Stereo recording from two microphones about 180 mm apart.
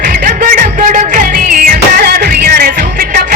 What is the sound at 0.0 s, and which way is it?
Music, 50° right (ahead or behind).